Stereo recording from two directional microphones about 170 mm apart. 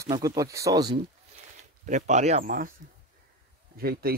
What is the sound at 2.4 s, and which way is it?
Speech, 55° right (ahead or behind).